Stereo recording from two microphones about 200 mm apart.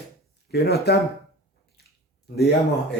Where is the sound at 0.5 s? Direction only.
55° left (ahead or behind).